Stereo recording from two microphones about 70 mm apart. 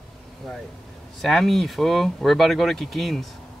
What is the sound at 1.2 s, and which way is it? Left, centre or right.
Speech, centre.